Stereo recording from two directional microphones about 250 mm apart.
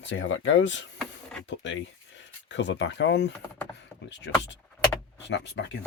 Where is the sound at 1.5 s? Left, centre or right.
Left.